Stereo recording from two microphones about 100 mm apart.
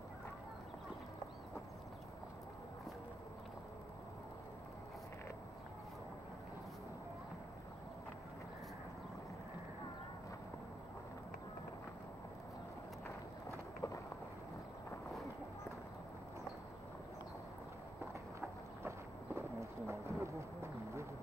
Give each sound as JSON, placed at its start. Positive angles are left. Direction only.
{"t": 13.0, "sound": "run", "side_deg": 30}
{"t": 18.9, "sound": "clip-clop", "side_deg": -25}